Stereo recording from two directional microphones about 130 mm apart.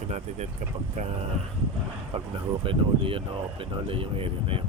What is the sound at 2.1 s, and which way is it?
Speech, 45° right (ahead or behind).